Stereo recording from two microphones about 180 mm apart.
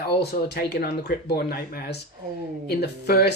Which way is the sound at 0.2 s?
60° left (ahead or behind).